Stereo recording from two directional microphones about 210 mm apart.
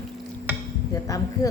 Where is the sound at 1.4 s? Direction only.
15° left (ahead or behind).